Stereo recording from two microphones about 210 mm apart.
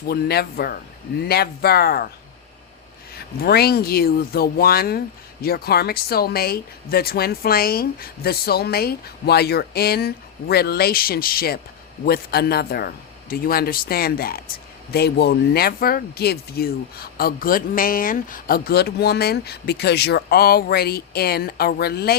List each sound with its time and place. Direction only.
0.1 s speech: 50° left (ahead or behind)
3.4 s speech: 50° left (ahead or behind)